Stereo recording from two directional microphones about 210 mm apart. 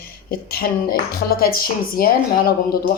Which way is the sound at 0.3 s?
45° left (ahead or behind).